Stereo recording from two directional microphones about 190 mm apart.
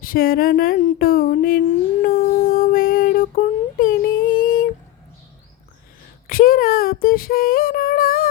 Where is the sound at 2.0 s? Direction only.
50° left (ahead or behind).